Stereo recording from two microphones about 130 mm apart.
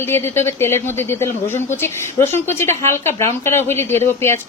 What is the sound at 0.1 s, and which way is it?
A woman's voice, 20° left (ahead or behind).